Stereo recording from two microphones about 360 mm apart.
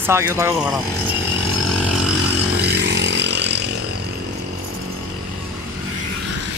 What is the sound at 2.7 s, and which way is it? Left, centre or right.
Chainsaw, right.